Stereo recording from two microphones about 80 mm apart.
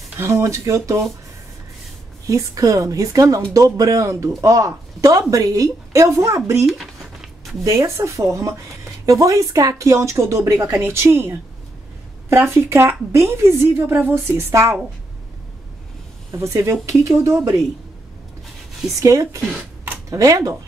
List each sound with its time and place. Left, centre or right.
0.2 s speech: right
2.2 s a woman's voice: right
6.6 s a sound: centre
7.6 s speech: right
16.3 s speech: right
18.9 s a woman's voice: right